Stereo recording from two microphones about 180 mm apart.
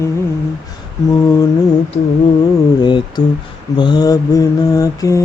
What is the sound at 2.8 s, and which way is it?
Mantra, 25° left (ahead or behind).